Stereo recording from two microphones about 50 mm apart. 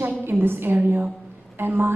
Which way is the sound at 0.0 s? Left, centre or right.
Right.